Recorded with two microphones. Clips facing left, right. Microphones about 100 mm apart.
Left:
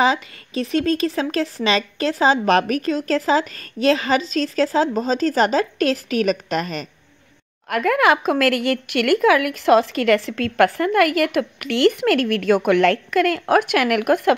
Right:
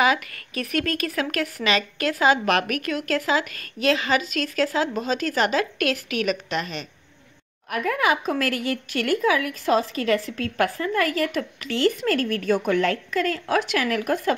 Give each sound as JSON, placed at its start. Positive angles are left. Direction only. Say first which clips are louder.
{"t": 0.0, "sound": "speech", "louder": "left 3 dB", "side_deg": 25}
{"t": 7.7, "sound": "speech", "louder": "left 6 dB", "side_deg": 90}